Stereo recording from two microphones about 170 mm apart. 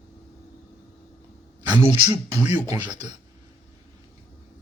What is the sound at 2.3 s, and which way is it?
Speech, 10° right (ahead or behind).